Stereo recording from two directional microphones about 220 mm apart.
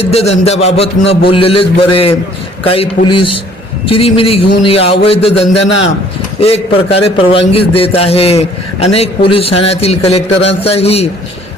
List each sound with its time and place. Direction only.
0.0 s a man's voice: 30° left (ahead or behind)